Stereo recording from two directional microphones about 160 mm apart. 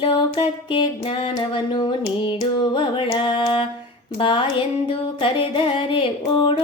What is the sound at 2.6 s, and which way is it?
Music, 30° left (ahead or behind).